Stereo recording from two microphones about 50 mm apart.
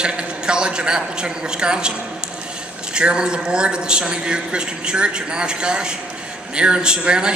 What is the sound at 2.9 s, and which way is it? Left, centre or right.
A man's voice, centre.